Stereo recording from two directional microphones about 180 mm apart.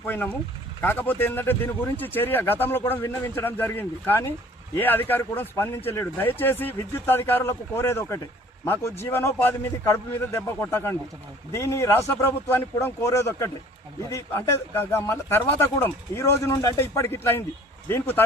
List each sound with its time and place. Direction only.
0.0 s speech: 10° left (ahead or behind)